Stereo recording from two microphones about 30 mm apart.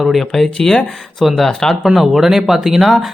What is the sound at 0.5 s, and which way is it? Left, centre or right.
Speech, left.